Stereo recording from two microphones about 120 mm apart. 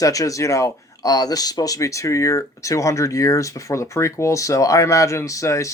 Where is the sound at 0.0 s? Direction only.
30° left (ahead or behind).